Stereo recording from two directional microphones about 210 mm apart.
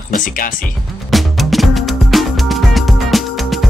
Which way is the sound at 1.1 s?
Centre (ahead or behind).